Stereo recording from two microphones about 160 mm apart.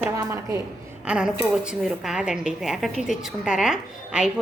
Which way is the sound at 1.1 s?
5° right (ahead or behind).